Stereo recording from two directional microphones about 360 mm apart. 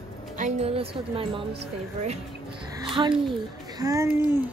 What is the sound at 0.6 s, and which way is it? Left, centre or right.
Speech, centre.